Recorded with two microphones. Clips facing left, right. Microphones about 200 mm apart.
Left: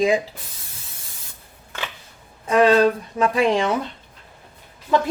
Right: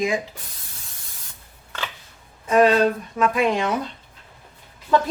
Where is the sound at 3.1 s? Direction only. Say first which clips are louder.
Even; 30° left (ahead or behind).